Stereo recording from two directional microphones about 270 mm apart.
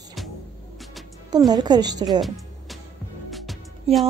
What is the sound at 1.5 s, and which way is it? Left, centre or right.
Speech, centre.